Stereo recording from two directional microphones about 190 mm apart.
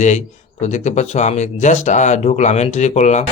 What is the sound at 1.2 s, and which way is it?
Speech, 40° left (ahead or behind).